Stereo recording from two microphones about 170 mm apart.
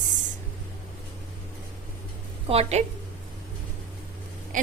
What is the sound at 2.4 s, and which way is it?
Speech, 35° right (ahead or behind).